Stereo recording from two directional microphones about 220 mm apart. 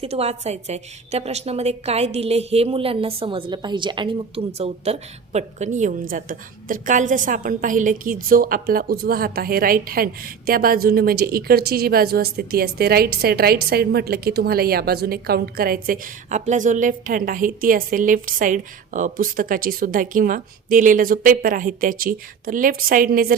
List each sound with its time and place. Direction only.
0.0 s a woman's voice: 30° right (ahead or behind)